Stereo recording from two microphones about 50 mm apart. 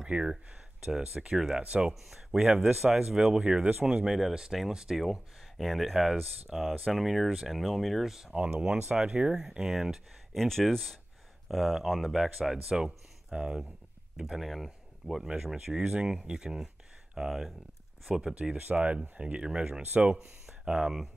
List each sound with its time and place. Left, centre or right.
0.0 s speech: centre
2.0 s speech: centre
5.0 s speech: centre
8.1 s speech: centre
10.3 s speech: centre
18.4 s speech: right
19.8 s speech: right
20.4 s a sound: centre